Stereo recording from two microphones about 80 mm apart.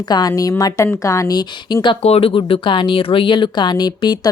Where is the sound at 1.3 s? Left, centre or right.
Left.